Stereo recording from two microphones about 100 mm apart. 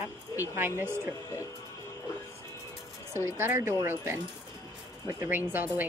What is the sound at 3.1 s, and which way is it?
A woman's voice, 25° right (ahead or behind).